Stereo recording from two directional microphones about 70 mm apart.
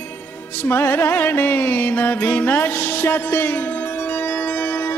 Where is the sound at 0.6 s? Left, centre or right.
Left.